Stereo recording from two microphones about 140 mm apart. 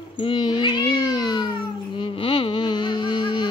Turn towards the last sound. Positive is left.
turn(degrees=30)  # may be behind; listen again after turning